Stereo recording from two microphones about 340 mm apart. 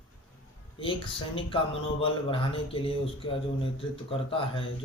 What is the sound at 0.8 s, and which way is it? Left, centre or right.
Speech, centre.